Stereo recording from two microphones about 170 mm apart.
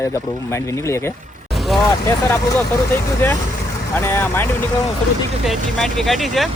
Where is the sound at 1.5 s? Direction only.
Centre (ahead or behind).